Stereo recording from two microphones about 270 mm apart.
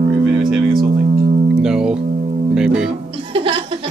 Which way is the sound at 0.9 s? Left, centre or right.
Right.